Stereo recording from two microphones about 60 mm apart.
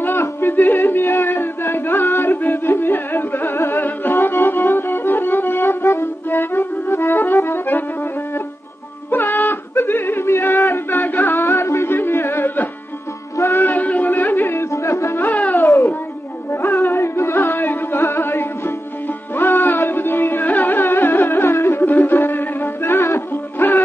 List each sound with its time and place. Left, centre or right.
0.0 s a sound: left
9.1 s yodeling: left
11.3 s music: left
14.7 s music: left
15.6 s a sound: left
16.5 s music: left